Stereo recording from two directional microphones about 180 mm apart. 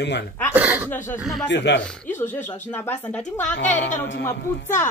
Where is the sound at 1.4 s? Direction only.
80° left.